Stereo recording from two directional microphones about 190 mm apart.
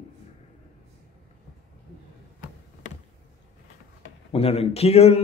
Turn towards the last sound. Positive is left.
turn(degrees=35)  # may be behind; listen again after turning